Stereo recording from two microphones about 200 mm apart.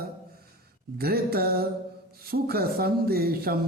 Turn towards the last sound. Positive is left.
turn(degrees=-50)  # may be behind; listen again after turning